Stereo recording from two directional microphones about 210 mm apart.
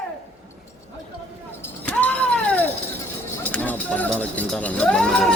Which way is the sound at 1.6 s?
10° left (ahead or behind).